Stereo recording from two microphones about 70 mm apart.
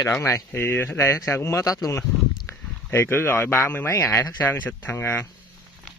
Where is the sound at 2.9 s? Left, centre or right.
Left.